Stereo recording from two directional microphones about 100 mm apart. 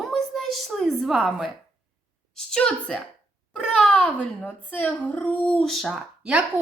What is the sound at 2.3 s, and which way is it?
A woman's voice, 10° left (ahead or behind).